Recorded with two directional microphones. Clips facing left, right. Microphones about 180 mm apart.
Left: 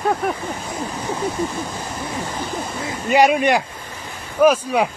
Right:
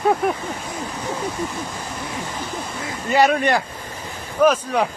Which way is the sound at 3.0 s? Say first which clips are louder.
Left 2 dB; 15° left (ahead or behind).